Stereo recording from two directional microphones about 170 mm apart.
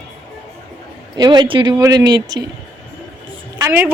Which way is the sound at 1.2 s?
25° right (ahead or behind).